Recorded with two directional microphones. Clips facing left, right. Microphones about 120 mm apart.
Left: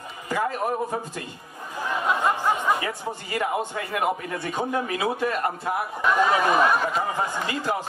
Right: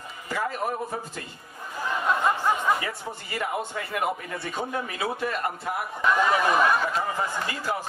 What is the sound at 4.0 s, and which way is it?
Speech, 20° left (ahead or behind).